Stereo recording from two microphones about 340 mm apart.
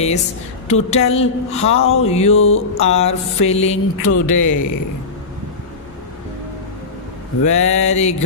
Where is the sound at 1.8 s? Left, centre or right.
Left.